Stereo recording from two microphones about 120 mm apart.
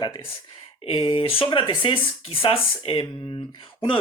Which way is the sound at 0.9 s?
45° left (ahead or behind).